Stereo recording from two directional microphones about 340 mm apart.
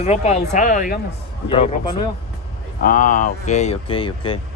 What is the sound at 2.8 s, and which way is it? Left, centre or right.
Speech, left.